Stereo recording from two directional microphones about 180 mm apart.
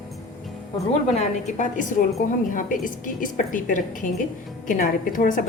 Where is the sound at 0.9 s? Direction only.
40° left (ahead or behind).